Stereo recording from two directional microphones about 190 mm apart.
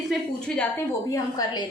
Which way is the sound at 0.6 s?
15° left (ahead or behind).